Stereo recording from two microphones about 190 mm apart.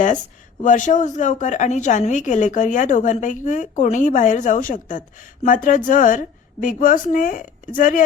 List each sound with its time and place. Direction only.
0.6 s a woman's voice: 40° left (ahead or behind)